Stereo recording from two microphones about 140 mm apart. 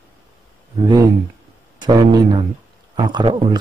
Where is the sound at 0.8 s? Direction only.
35° right (ahead or behind).